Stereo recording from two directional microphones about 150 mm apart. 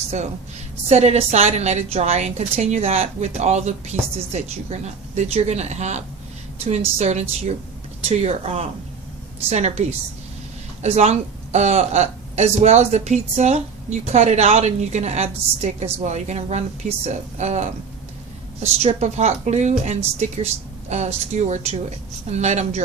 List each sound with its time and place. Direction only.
0.9 s a woman's voice: 45° right (ahead or behind)